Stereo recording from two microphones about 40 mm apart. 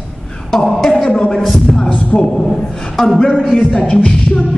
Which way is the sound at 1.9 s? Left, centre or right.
Left.